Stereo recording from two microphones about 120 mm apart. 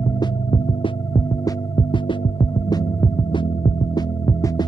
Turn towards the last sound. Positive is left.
turn(degrees=35)  # may be behind; listen again after turning